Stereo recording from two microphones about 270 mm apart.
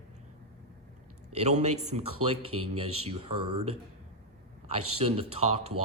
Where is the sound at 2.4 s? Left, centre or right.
Right.